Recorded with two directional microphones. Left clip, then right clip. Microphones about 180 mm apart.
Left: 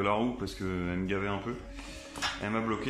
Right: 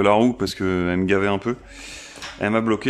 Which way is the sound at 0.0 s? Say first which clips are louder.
Right 13 dB; 65° right (ahead or behind).